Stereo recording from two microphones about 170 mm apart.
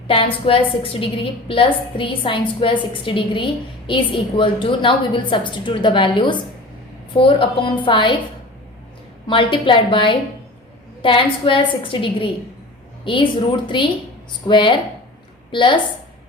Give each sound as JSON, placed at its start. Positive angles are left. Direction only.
{"t": 0.1, "sound": "a woman's voice", "side_deg": 30}
{"t": 9.2, "sound": "a woman's voice", "side_deg": 30}
{"t": 14.4, "sound": "a woman's voice", "side_deg": 30}